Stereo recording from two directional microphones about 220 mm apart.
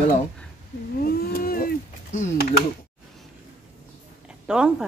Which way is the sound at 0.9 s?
40° left (ahead or behind).